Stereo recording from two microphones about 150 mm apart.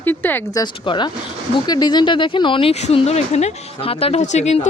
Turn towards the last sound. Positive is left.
turn(degrees=50)  # may be behind; listen again after turning